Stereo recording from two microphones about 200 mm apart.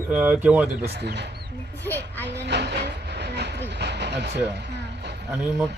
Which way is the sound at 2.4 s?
60° right (ahead or behind).